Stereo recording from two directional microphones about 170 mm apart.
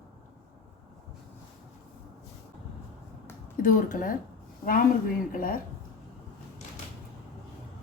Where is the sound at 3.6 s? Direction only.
50° left (ahead or behind).